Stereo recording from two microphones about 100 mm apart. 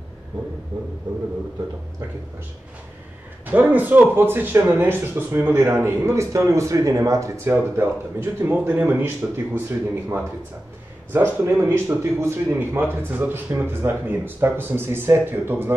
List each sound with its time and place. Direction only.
3.4 s speech: 15° right (ahead or behind)